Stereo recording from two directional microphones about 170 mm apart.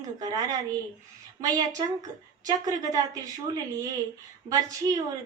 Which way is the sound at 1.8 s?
25° right (ahead or behind).